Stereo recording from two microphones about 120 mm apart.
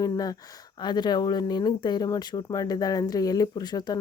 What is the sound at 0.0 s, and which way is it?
Speech, 30° left (ahead or behind).